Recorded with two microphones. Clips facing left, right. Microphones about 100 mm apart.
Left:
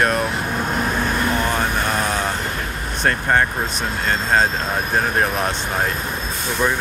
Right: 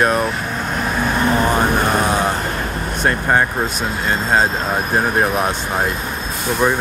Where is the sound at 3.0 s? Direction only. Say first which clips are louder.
Right 1 dB; 10° right (ahead or behind).